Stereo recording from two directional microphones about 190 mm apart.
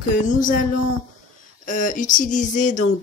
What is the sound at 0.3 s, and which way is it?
Speech, 45° left (ahead or behind).